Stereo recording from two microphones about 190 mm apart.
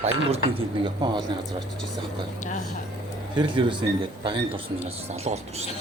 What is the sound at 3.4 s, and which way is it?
Speech, 25° right (ahead or behind).